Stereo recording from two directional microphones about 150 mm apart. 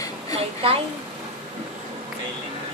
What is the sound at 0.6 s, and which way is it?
Speech, 35° right (ahead or behind).